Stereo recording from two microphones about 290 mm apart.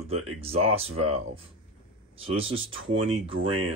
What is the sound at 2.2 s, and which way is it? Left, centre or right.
Speech, centre.